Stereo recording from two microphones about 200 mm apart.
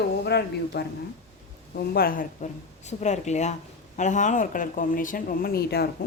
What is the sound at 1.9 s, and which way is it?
A woman's voice, 50° left (ahead or behind).